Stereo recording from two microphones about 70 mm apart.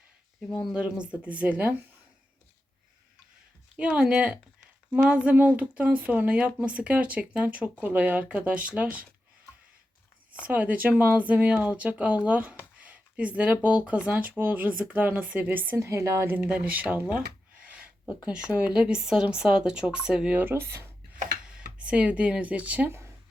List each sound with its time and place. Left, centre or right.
0.7 s speech: centre
3.8 s a woman's voice: centre
10.4 s speech: right
15.7 s a woman's voice: right
16.5 s speech: right
17.1 s a sound: right
18.1 s a woman's voice: centre
20.4 s speech: right
21.1 s a sound: centre